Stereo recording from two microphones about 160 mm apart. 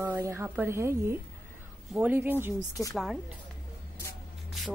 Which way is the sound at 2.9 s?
Centre (ahead or behind).